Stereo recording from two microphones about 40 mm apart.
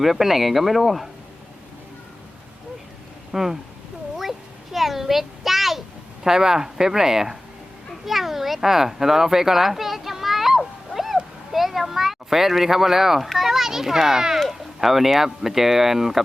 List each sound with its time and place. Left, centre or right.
0.0 s speech: centre
3.3 s speech: centre
4.2 s a sound: centre
6.2 s speech: centre
8.0 s a sound: centre
14.3 s speech: centre